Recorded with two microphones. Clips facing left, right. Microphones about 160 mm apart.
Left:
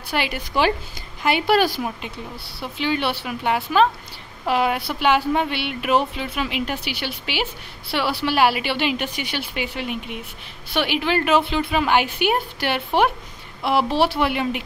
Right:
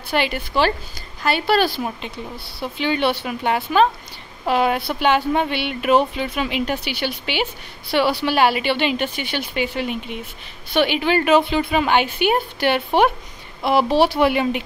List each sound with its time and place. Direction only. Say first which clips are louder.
0.1 s speech: right 3 dB; 10° left (ahead or behind)
2.6 s speech: right 3 dB; centre (ahead or behind)